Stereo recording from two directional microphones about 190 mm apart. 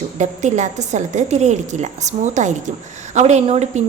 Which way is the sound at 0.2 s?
40° right (ahead or behind).